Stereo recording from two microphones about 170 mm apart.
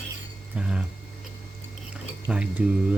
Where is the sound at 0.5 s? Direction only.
5° right (ahead or behind).